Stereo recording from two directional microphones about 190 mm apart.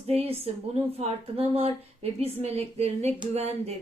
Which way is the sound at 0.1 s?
30° right (ahead or behind).